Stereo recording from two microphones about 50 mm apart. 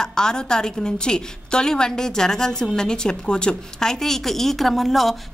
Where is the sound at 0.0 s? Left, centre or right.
Centre.